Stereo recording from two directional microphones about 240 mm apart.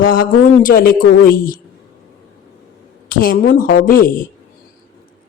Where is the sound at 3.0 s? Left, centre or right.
Left.